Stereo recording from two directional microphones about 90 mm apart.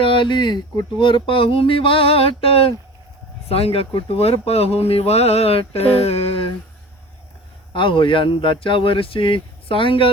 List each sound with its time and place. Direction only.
0.0 s speech: 70° left (ahead or behind)
0.9 s a sound: 65° left (ahead or behind); by 2.7 s 90° left
3.5 s speech: 90° left
7.7 s speech: 70° left (ahead or behind)